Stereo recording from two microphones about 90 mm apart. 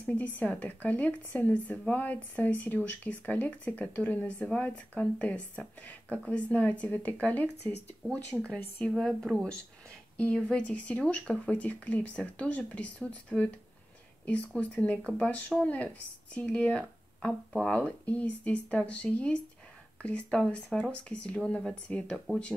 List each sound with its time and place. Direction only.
0.0 s speech: 15° left (ahead or behind)